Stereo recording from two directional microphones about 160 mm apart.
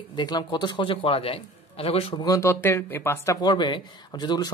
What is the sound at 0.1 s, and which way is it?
A man's voice, 25° left (ahead or behind).